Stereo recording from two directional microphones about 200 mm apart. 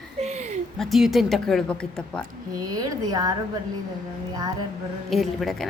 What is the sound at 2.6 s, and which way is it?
Speech, 20° right (ahead or behind).